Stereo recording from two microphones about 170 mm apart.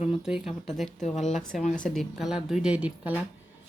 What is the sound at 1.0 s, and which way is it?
Speech, 40° left (ahead or behind).